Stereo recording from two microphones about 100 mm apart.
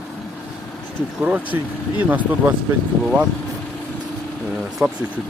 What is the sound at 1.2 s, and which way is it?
Speech, 15° right (ahead or behind).